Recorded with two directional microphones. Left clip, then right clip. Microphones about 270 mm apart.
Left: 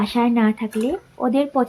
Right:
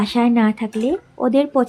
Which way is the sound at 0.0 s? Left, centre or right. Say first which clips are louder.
Right 2 dB; right.